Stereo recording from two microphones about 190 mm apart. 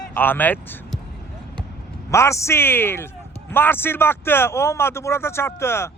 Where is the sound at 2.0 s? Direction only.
15° left (ahead or behind).